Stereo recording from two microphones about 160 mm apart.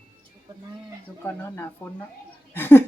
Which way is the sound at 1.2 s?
10° left (ahead or behind).